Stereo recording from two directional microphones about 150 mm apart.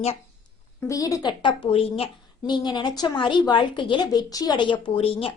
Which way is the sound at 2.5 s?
30° left (ahead or behind).